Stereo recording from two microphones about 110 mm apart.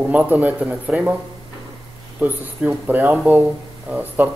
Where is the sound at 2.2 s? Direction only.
15° right (ahead or behind).